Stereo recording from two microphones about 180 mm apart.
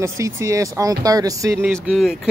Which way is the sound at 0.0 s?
15° right (ahead or behind).